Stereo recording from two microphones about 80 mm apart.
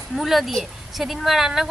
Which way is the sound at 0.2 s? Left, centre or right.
Centre.